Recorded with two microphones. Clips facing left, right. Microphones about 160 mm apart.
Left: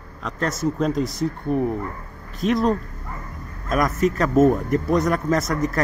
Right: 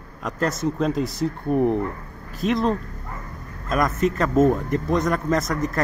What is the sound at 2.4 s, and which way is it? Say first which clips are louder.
Speech: left 2 dB; centre (ahead or behind).